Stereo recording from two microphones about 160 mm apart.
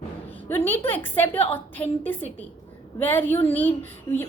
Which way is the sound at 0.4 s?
10° left (ahead or behind).